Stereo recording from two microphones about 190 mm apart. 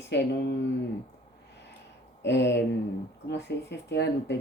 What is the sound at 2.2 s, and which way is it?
Speech, 65° left (ahead or behind).